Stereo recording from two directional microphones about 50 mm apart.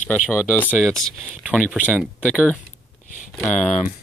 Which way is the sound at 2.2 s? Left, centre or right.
Left.